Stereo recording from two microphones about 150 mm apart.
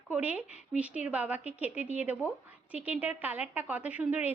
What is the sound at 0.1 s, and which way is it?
A woman's voice, 10° right (ahead or behind).